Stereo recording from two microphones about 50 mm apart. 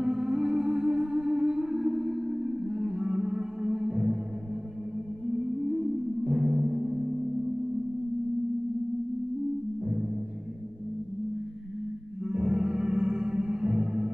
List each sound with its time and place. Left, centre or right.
0.0 s music: centre
5.2 s music: centre
12.3 s music: centre